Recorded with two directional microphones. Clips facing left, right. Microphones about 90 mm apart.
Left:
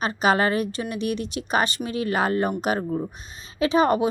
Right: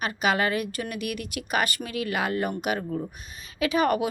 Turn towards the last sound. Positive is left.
turn(degrees=30)  # may be behind; listen again after turning